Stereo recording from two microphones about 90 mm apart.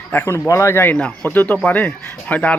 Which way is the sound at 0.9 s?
10° left (ahead or behind).